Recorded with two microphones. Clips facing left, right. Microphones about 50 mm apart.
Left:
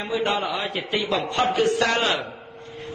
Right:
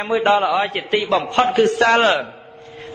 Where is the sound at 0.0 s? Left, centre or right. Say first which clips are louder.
Right 8 dB; right.